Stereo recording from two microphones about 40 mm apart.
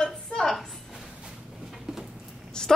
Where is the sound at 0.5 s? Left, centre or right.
Centre.